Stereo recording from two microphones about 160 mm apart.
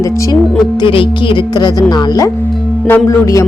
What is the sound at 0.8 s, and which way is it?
A woman's voice, 30° left (ahead or behind).